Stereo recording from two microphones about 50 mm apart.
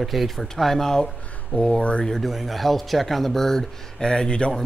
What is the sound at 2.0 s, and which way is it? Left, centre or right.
Speech, centre.